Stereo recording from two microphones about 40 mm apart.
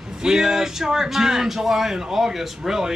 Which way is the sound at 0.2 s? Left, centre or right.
Centre.